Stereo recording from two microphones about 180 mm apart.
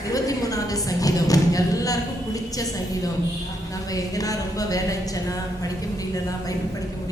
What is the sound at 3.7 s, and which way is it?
A woman's voice, 20° left (ahead or behind).